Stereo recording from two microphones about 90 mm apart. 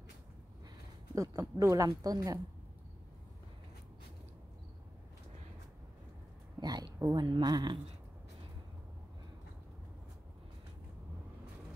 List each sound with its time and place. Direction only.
1.1 s speech: 35° right (ahead or behind)
6.6 s speech: 45° right (ahead or behind)